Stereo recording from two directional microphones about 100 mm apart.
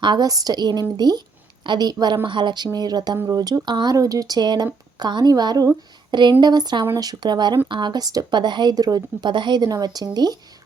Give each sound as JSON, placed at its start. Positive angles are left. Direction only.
{"t": 0.0, "sound": "speech", "side_deg": -45}